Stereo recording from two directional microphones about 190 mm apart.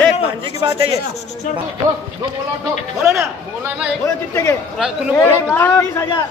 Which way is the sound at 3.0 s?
5° right (ahead or behind).